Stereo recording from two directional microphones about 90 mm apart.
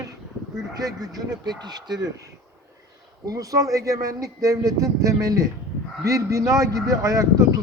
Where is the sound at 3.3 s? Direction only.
40° right (ahead or behind).